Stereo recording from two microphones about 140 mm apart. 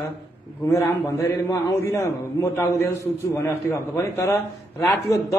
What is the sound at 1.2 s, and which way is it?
A man's voice, 25° left (ahead or behind).